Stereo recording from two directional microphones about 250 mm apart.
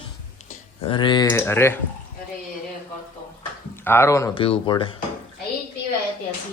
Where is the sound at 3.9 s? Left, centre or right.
Centre.